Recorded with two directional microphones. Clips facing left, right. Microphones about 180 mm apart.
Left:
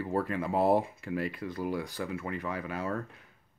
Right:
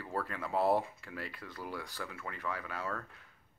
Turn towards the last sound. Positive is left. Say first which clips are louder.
# left 6 dB
turn(degrees=20)  # may be behind; listen again after turning